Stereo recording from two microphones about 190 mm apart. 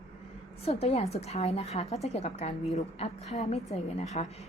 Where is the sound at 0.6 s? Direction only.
35° left (ahead or behind).